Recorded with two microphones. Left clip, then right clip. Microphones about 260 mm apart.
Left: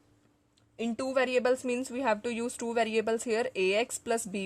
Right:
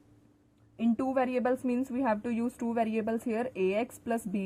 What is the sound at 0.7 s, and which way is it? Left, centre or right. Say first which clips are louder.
Speech: even; left.